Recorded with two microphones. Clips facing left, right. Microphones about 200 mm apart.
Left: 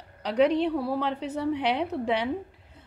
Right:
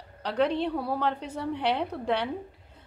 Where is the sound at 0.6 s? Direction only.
Centre (ahead or behind).